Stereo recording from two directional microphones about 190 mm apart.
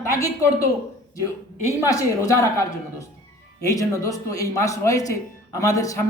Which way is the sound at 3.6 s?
15° left (ahead or behind).